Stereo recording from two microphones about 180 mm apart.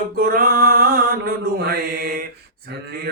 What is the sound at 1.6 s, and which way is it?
Mantra, 60° right (ahead or behind).